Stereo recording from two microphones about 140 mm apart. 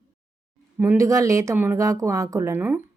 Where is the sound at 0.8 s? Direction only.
20° right (ahead or behind).